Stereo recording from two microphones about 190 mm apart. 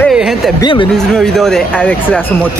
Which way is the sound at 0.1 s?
5° right (ahead or behind).